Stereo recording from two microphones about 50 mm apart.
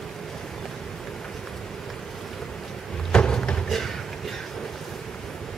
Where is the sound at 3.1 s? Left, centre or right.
Centre.